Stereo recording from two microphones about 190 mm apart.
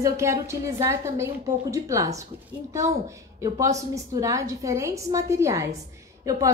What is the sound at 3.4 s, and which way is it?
A woman's voice, 15° right (ahead or behind).